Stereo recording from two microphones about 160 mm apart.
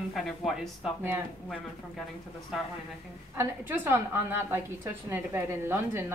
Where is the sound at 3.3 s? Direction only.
15° right (ahead or behind).